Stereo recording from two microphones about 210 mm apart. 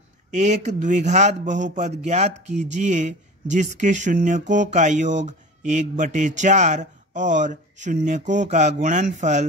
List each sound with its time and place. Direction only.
0.3 s speech: 35° right (ahead or behind)